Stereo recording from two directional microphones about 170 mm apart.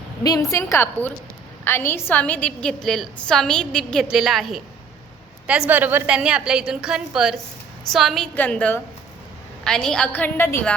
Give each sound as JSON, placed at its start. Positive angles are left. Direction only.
{"t": 0.2, "sound": "a woman's voice", "side_deg": 20}